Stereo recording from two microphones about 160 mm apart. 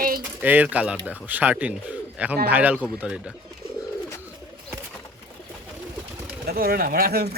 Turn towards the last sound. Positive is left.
turn(degrees=-75)  # may be behind; listen again after turning